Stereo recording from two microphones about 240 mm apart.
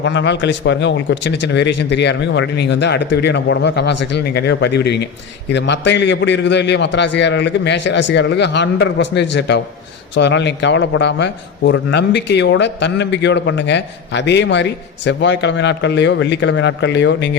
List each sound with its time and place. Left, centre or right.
0.0 s a man's voice: left